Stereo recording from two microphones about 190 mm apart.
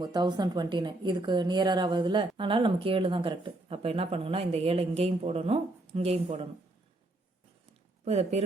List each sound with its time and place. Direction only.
0.0 s a woman's voice: 20° right (ahead or behind)
8.0 s speech: 35° right (ahead or behind)